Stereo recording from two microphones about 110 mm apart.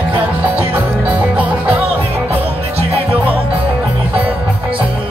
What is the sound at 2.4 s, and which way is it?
Music, 60° right (ahead or behind).